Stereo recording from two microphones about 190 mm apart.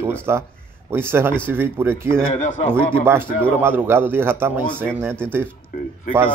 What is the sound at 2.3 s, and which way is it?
Speech, 35° left (ahead or behind).